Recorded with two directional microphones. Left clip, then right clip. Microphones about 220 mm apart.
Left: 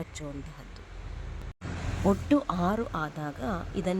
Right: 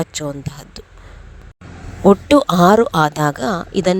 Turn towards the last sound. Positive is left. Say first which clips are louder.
# right 15 dB
turn(degrees=-35)  # may be behind; listen again after turning